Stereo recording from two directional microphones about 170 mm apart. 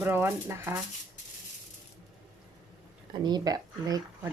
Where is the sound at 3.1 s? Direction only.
25° right (ahead or behind).